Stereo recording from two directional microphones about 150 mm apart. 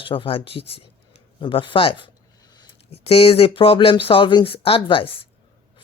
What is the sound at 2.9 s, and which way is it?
Speech, 40° left (ahead or behind).